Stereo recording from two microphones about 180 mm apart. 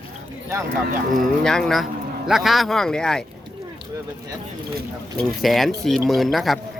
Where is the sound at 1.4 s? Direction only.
5° left (ahead or behind).